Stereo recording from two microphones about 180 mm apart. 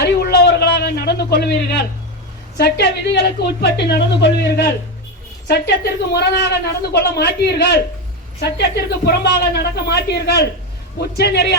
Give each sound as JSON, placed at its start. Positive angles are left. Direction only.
{"t": 0.0, "sound": "a sound", "side_deg": 65}
{"t": 2.6, "sound": "a woman's voice", "side_deg": 65}
{"t": 9.0, "sound": "a man's voice", "side_deg": 65}